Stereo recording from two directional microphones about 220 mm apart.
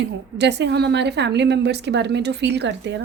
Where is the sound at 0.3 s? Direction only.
50° right (ahead or behind).